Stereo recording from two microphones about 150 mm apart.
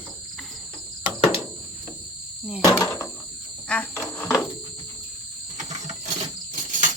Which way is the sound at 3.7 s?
10° left (ahead or behind).